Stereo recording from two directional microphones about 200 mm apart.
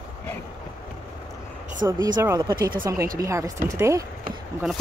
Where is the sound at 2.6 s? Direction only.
45° right (ahead or behind).